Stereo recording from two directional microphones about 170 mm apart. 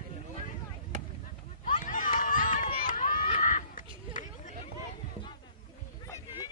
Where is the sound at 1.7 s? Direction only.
50° left (ahead or behind).